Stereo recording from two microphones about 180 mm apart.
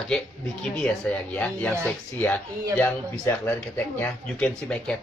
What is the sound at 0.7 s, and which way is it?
Speech, 5° left (ahead or behind).